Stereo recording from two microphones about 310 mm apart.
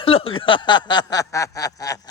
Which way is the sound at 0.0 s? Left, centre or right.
Centre.